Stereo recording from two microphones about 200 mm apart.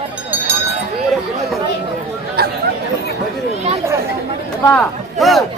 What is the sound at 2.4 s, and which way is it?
Chatter, 55° right (ahead or behind).